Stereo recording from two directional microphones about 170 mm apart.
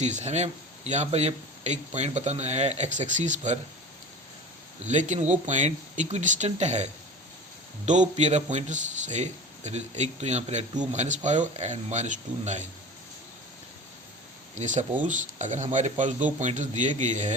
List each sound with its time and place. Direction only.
0.0 s speech: 45° right (ahead or behind)
4.9 s speech: 45° right (ahead or behind)
8.1 s speech: 45° right (ahead or behind)
14.5 s speech: 45° right (ahead or behind)